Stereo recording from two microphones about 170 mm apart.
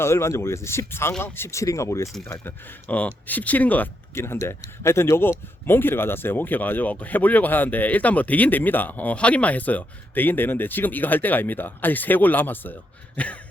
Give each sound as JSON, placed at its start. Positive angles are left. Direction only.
{"t": 0.0, "sound": "speech", "side_deg": 15}